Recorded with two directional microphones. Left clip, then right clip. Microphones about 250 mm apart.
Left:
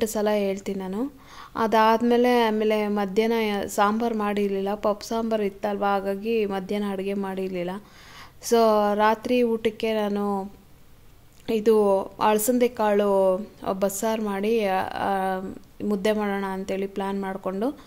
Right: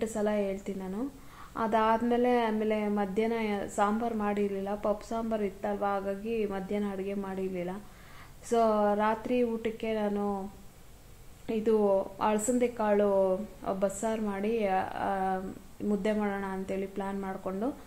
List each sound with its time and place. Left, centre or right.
0.0 s a woman's voice: left
11.4 s a woman's voice: left